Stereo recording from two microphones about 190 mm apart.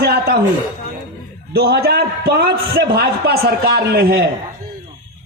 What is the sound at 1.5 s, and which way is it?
A man's voice, 55° right (ahead or behind).